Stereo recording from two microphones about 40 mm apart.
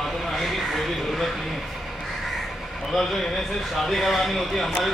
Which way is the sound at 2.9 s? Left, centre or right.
Centre.